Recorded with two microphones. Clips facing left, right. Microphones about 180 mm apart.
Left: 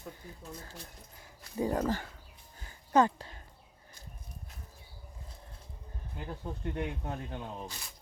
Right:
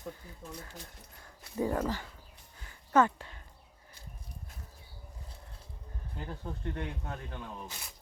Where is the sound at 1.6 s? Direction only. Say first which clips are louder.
Even; 30° left (ahead or behind).